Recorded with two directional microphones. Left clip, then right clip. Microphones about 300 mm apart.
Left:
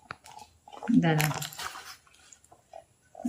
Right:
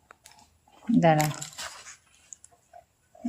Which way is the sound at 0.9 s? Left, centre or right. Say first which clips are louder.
Right 5 dB; centre.